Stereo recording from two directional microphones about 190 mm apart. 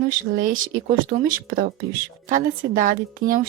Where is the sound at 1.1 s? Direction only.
50° right (ahead or behind).